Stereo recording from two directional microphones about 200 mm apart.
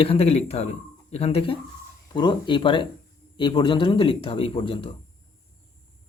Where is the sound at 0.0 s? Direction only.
30° left (ahead or behind).